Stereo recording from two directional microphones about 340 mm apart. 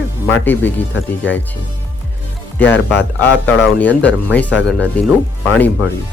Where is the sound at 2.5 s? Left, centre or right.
Centre.